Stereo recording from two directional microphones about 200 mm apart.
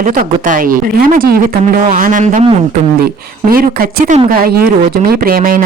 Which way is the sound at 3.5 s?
45° right (ahead or behind).